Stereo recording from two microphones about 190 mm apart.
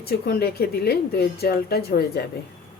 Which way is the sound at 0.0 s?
55° left (ahead or behind).